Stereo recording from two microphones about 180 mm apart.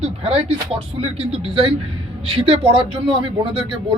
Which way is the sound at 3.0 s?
30° right (ahead or behind).